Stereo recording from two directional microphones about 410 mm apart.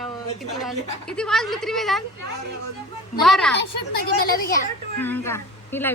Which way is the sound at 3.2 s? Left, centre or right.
Centre.